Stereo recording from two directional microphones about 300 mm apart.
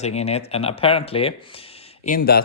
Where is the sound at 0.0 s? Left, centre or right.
Left.